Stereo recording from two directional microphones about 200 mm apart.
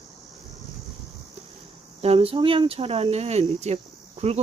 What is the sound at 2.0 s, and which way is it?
Speech, 30° right (ahead or behind).